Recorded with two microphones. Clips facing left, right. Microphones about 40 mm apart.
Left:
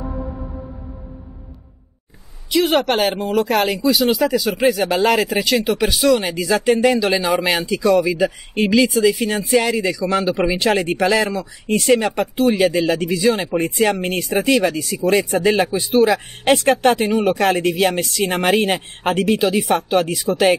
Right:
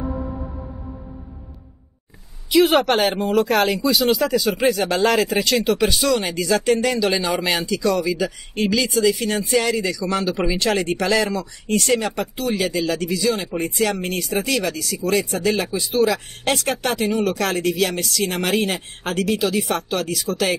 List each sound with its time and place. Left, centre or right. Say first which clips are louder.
2.5 s speech: right 1 dB; centre; by 20.5 s left